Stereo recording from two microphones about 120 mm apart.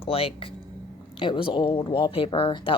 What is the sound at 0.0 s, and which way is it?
Speech, 50° left (ahead or behind).